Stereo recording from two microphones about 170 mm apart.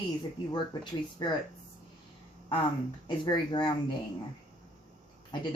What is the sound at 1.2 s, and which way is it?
Speech, 25° left (ahead or behind).